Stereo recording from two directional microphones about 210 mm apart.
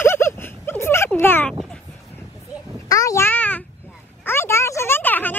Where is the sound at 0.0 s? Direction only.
10° left (ahead or behind).